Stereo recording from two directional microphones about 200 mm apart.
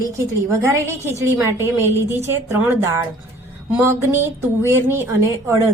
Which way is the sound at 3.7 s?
10° right (ahead or behind).